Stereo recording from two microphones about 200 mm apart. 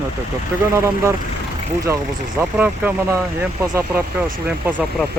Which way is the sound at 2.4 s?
10° right (ahead or behind).